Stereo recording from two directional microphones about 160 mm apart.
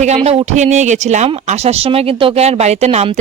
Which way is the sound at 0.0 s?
40° right (ahead or behind).